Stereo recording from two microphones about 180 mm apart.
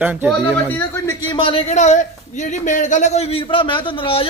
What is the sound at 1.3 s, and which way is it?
A man's voice, 30° left (ahead or behind).